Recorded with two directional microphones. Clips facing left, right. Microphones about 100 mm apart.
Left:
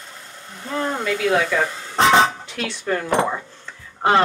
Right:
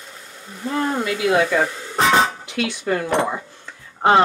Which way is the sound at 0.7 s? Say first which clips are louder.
Right 1 dB; 10° right (ahead or behind).